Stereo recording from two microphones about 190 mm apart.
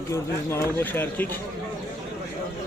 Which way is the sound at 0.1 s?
10° left (ahead or behind).